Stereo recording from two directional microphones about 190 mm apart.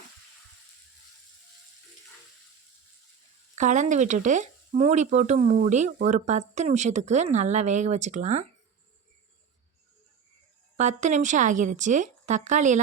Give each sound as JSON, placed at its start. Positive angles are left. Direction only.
{"t": 3.5, "sound": "speech", "side_deg": -40}
{"t": 10.8, "sound": "speech", "side_deg": -40}